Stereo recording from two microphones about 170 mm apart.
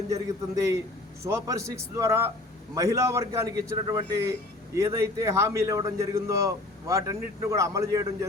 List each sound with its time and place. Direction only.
0.1 s a man's voice: 20° right (ahead or behind)